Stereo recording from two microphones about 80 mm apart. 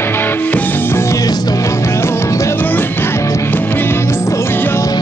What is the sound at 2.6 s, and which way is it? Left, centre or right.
Music, left.